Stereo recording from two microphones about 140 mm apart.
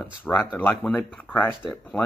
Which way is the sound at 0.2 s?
15° left (ahead or behind).